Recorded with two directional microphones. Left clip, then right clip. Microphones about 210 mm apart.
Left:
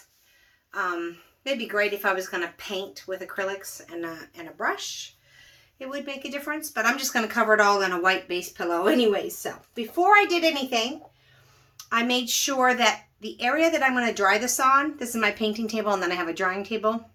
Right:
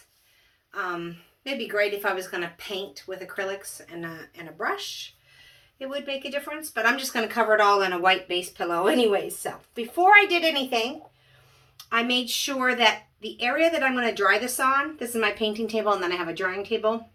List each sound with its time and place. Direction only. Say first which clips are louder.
0.7 s speech: left 2 dB; 35° left (ahead or behind)
5.8 s a woman's voice: right 2 dB; 35° left (ahead or behind)
11.9 s speech: even; 30° left (ahead or behind)